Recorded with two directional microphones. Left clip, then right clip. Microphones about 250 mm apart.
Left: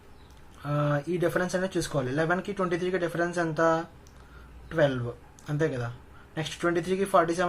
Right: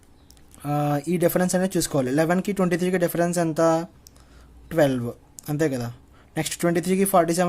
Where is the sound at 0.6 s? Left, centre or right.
Right.